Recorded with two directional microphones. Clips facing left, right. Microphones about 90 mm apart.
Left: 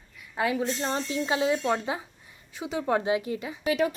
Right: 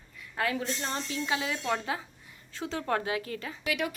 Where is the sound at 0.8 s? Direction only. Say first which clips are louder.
Left 5 dB; 25° left (ahead or behind).